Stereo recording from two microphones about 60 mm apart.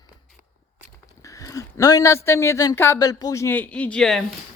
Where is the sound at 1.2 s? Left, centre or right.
Left.